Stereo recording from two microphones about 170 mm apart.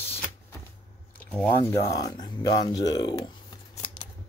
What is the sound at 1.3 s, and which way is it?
Speech, 10° left (ahead or behind).